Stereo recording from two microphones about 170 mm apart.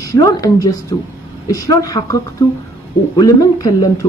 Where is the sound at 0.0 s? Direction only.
20° left (ahead or behind).